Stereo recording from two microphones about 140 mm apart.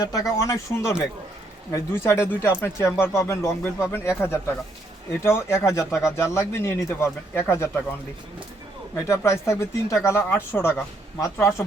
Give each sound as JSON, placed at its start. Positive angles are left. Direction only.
{"t": 0.0, "sound": "speech", "side_deg": 25}
{"t": 9.0, "sound": "speech", "side_deg": 20}